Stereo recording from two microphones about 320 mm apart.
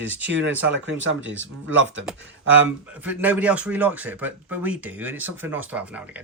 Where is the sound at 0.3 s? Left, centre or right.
Right.